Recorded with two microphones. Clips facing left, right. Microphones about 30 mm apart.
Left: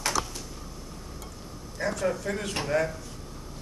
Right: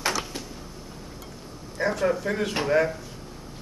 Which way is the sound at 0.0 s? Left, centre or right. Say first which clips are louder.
Right 2 dB; right.